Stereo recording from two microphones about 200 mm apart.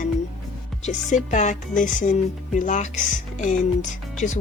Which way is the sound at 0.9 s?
35° left (ahead or behind).